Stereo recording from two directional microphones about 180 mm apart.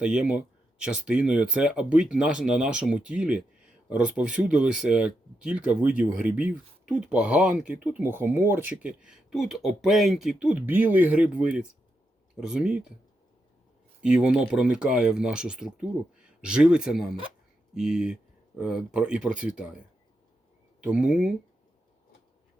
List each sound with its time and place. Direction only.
0.0 s speech: 5° right (ahead or behind)
14.0 s speech: 5° right (ahead or behind)
20.8 s speech: 5° right (ahead or behind)